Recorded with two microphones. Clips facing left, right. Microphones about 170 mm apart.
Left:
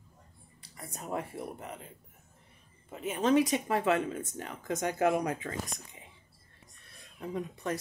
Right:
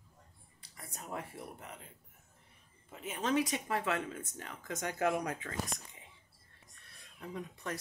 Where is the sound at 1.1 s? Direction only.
20° left (ahead or behind).